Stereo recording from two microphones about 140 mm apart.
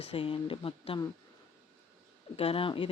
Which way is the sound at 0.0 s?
40° left (ahead or behind).